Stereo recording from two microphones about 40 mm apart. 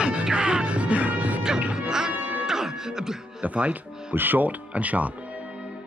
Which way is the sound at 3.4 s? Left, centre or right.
Right.